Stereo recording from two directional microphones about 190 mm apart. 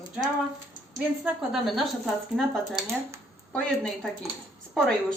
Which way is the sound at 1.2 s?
Centre (ahead or behind).